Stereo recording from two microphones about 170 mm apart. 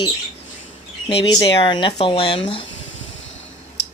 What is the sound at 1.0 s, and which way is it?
Speech, 25° left (ahead or behind).